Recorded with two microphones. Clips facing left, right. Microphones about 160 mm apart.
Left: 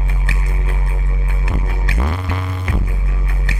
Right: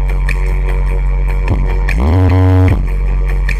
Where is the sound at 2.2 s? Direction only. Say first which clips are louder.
Right 13 dB; 55° right (ahead or behind).